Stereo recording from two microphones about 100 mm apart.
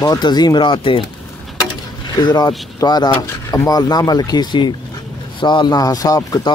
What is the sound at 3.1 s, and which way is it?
Speech, 25° left (ahead or behind).